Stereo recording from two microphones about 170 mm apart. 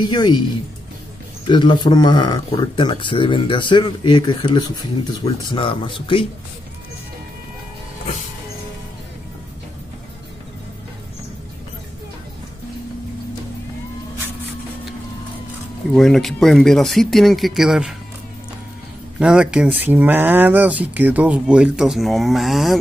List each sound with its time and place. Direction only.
0.0 s speech: 25° left (ahead or behind)
1.5 s speech: 25° left (ahead or behind)
15.9 s speech: 5° left (ahead or behind)
19.1 s speech: 5° right (ahead or behind)